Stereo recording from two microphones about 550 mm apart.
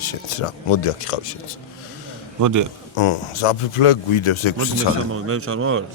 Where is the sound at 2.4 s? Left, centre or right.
Right.